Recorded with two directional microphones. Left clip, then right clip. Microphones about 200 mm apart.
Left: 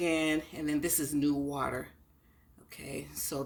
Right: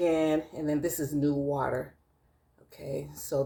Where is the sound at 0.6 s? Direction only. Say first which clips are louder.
Right 3 dB; 50° left (ahead or behind).